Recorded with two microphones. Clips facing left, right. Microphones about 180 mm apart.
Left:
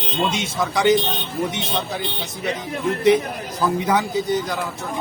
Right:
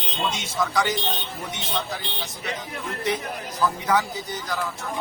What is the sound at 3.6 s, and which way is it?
Speech, 20° left (ahead or behind).